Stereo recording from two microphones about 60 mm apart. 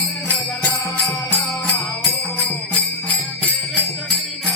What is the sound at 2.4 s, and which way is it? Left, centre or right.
Jingle bell, left.